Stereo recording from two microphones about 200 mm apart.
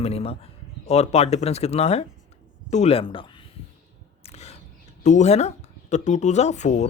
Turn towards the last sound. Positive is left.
turn(degrees=35)  # may be behind; listen again after turning